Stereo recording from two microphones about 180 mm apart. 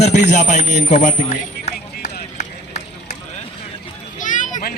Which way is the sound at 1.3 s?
40° left (ahead or behind).